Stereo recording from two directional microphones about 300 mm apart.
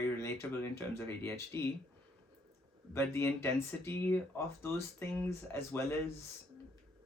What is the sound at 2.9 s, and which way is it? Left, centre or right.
Speech, centre.